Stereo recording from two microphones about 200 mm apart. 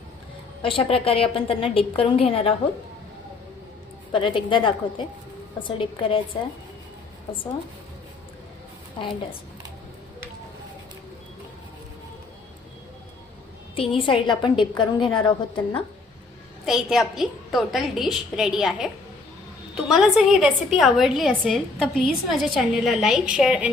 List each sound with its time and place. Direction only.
0.6 s a woman's voice: 25° left (ahead or behind)
4.1 s a woman's voice: 25° left (ahead or behind)
13.7 s a woman's voice: 25° left (ahead or behind)
16.6 s a woman's voice: centre (ahead or behind)